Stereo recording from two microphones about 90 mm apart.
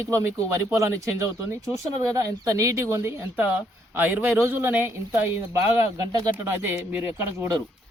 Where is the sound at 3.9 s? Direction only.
20° right (ahead or behind).